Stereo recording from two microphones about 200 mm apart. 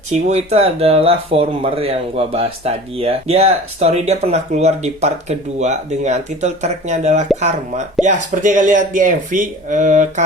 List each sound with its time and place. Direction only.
0.1 s speech: 35° right (ahead or behind)